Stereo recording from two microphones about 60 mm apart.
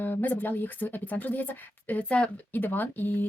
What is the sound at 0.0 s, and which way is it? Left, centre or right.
A woman's voice, left.